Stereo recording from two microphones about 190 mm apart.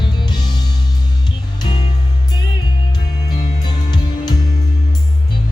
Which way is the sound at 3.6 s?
20° left (ahead or behind).